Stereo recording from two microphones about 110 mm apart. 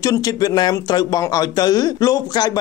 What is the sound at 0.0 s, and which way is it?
Speech, 35° left (ahead or behind).